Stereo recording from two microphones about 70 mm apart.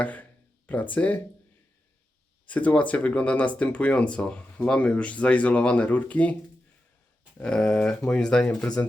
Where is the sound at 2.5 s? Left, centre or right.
Left.